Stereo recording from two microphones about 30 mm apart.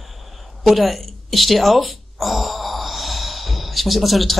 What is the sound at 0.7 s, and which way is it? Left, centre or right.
A woman's voice, centre.